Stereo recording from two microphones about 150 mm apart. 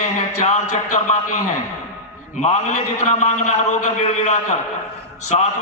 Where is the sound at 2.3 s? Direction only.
50° left (ahead or behind).